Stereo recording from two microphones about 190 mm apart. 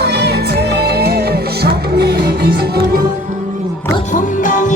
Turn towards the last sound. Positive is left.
turn(degrees=40)  # may be behind; listen again after turning